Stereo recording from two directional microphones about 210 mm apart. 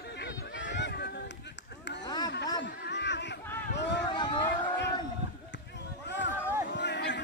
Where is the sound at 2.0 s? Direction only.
20° left (ahead or behind).